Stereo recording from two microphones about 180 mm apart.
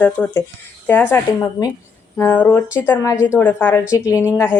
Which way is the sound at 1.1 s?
20° left (ahead or behind).